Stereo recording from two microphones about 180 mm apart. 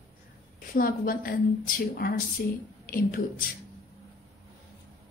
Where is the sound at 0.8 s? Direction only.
50° left (ahead or behind).